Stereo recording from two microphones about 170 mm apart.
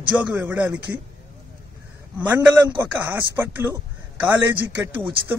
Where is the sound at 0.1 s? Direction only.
10° right (ahead or behind).